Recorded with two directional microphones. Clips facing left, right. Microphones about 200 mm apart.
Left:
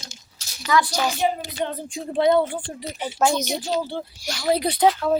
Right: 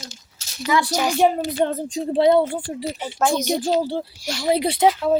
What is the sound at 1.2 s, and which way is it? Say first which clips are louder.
Speech: right 6 dB; 50° right (ahead or behind).